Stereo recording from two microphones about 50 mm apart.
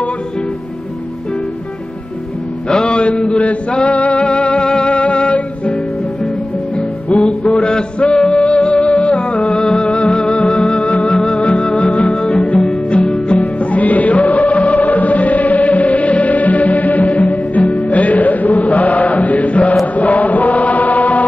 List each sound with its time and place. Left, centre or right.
2.7 s chant: left
4.2 s music: left
8.0 s music: centre
10.5 s music: centre
10.8 s music: left
20.0 s chant: left